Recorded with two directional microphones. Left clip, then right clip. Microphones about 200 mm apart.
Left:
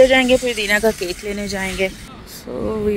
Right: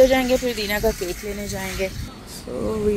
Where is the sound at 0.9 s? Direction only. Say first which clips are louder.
Left 4 dB; 55° left (ahead or behind).